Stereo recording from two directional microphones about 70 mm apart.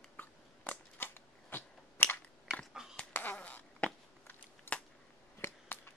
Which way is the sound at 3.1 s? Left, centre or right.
Left.